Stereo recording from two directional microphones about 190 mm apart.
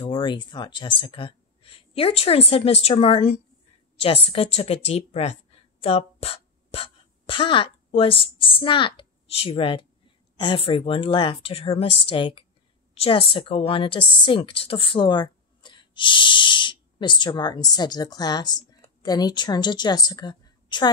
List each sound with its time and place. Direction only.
0.0 s a woman's voice: 25° left (ahead or behind)